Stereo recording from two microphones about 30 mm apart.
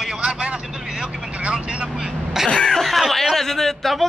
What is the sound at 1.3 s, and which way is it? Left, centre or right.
Speech, right.